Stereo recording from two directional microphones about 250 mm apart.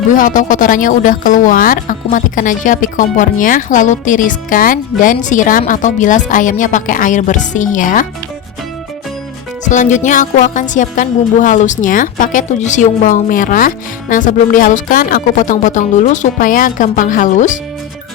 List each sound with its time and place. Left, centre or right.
0.1 s a woman's voice: left
9.6 s a woman's voice: left